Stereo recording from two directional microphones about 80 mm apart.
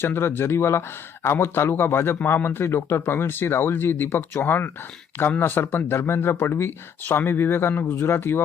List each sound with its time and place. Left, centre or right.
0.0 s speech: left